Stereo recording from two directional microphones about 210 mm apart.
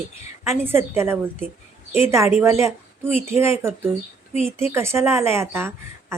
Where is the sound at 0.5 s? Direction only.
10° right (ahead or behind).